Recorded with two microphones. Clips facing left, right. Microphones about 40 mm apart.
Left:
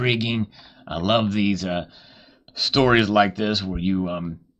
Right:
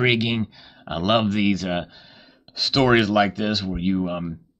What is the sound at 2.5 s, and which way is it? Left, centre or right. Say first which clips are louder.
Speech: even; centre.